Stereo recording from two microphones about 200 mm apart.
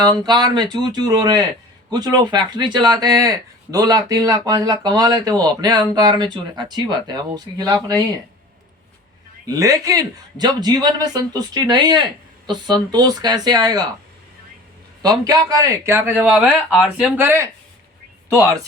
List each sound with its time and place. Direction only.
0.0 s speech: 20° right (ahead or behind)
9.5 s speech: 15° right (ahead or behind)
15.2 s speech: 20° right (ahead or behind)